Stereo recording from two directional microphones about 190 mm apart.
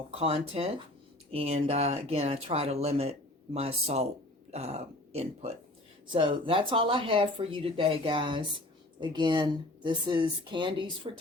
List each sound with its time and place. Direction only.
0.1 s speech: 30° right (ahead or behind)